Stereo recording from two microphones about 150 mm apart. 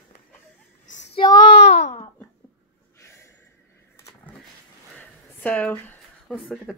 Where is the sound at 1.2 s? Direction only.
30° left (ahead or behind).